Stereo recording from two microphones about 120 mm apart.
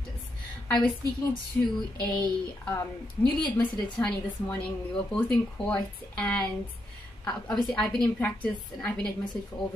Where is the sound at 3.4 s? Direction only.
5° left (ahead or behind).